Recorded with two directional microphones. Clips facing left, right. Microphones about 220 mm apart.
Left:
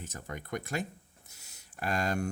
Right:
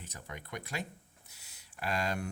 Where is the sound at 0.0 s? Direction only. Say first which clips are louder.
Left 5 dB; 45° left (ahead or behind).